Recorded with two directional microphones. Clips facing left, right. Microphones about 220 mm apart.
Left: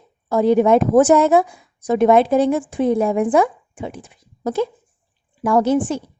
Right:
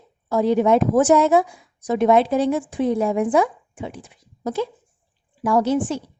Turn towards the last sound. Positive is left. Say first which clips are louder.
# left 3 dB
turn(degrees=50)  # may be behind; listen again after turning